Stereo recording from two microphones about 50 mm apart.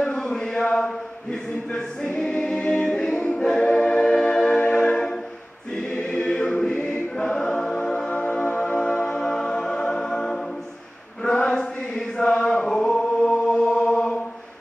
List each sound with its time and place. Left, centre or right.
0.2 s chant: centre
1.7 s choir: centre
2.6 s a capella: left
3.3 s choir: centre
4.9 s music: centre
6.0 s choir: centre
8.1 s music: centre
9.1 s music: centre
11.4 s chant: centre
12.6 s chant: centre
13.7 s chant: left
13.9 s chant: centre